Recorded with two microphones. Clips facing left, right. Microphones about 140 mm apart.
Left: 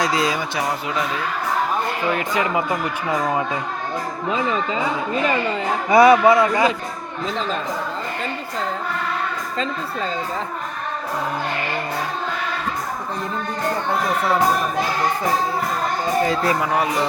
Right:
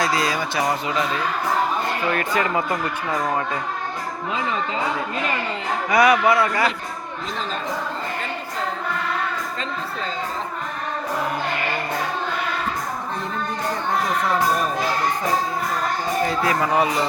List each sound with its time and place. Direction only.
0.0 s speech: 15° left (ahead or behind)
2.1 s speech: 15° left (ahead or behind)
5.9 s a man's voice: 25° left (ahead or behind)
16.6 s speech: centre (ahead or behind)